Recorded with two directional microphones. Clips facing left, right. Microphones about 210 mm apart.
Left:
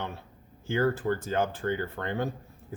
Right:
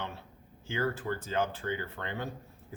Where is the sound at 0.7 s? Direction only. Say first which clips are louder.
Left 6 dB; 45° left (ahead or behind).